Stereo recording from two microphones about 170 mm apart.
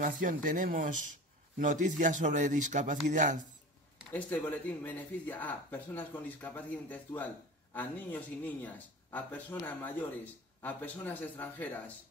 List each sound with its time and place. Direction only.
0.0 s speech: 50° right (ahead or behind)
4.1 s speech: 10° left (ahead or behind)